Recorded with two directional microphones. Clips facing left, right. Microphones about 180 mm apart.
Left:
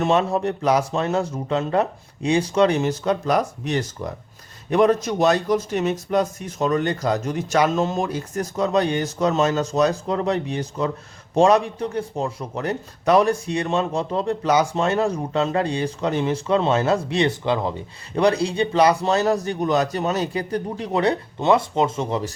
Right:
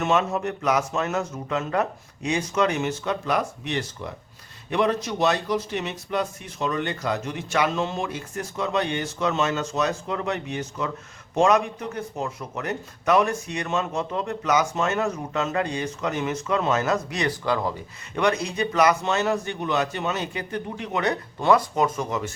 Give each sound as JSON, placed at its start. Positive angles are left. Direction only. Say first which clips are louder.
{"t": 0.0, "sound": "a man's voice", "louder": "left 3 dB", "side_deg": 35}
{"t": 18.1, "sound": "a man's voice", "louder": "left 5 dB", "side_deg": 35}